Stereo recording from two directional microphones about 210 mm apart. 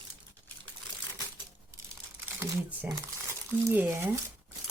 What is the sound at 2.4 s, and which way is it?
Speech, 10° right (ahead or behind).